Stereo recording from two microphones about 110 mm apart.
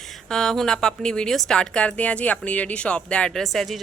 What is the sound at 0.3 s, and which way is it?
A woman's voice, 5° left (ahead or behind).